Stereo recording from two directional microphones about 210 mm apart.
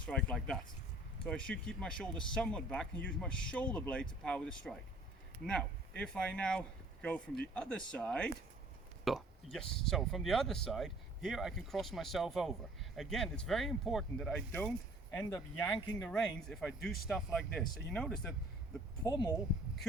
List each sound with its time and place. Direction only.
0.0 s speech: 5° left (ahead or behind)
6.0 s speech: 5° left (ahead or behind)
19.0 s speech: 20° left (ahead or behind)